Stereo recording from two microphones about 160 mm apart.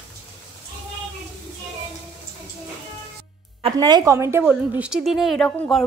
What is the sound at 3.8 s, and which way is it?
Speech, 25° right (ahead or behind).